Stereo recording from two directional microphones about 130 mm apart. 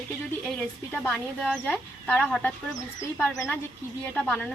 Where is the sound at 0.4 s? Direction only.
10° left (ahead or behind).